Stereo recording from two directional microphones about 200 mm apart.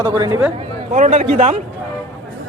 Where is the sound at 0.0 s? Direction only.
15° right (ahead or behind).